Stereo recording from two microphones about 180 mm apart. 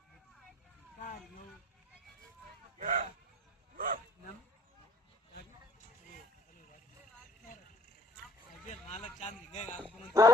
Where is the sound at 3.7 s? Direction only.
50° right (ahead or behind).